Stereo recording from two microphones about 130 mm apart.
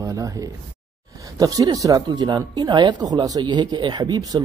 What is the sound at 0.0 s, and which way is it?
Speech, 25° right (ahead or behind).